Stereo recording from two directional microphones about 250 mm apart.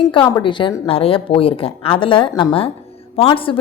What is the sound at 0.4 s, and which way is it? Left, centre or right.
A woman's voice, centre.